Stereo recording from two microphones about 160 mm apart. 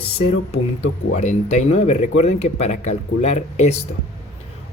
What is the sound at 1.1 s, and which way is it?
Speech, 45° left (ahead or behind).